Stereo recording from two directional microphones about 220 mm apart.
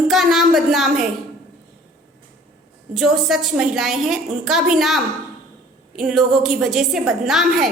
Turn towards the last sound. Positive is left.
turn(degrees=0)  # may be behind; listen again after turning